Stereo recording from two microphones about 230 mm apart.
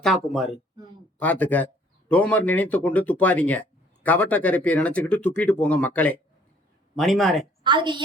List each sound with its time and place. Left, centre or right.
0.0 s speech: centre
7.6 s a woman's voice: centre